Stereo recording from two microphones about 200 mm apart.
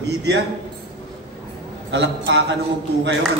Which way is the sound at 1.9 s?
60° right (ahead or behind).